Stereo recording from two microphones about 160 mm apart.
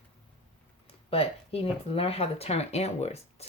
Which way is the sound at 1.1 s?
35° left (ahead or behind).